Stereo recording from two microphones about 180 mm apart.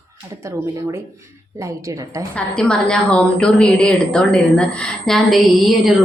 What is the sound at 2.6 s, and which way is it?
A woman's voice, 5° left (ahead or behind).